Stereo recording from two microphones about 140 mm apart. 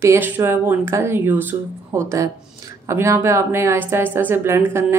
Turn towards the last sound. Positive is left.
turn(degrees=-20)  # may be behind; listen again after turning